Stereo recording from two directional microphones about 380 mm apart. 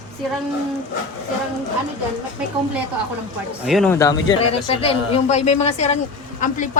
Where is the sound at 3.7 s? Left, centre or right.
Centre.